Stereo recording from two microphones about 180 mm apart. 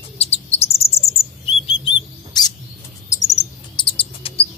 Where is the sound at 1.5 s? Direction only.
30° left (ahead or behind).